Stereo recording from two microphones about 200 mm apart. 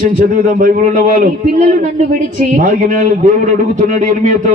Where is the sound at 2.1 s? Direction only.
40° right (ahead or behind).